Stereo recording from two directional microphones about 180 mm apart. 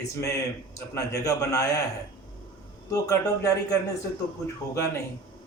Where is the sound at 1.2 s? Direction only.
15° left (ahead or behind).